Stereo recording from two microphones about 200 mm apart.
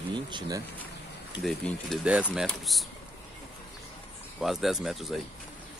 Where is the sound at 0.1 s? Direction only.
20° right (ahead or behind).